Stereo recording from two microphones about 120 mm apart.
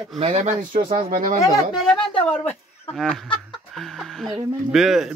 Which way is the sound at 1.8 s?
5° left (ahead or behind).